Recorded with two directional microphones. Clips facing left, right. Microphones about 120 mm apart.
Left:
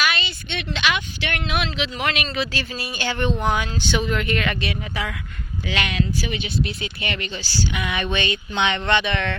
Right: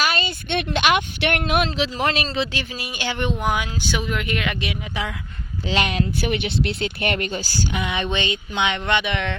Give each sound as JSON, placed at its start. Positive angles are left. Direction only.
{"t": 0.0, "sound": "speech", "side_deg": -40}
{"t": 5.6, "sound": "speech", "side_deg": -40}
{"t": 6.1, "sound": "speech", "side_deg": -60}
{"t": 7.8, "sound": "speech", "side_deg": -25}